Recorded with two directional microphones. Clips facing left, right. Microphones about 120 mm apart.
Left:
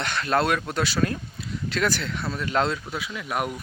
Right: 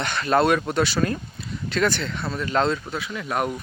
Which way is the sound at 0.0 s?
Centre (ahead or behind).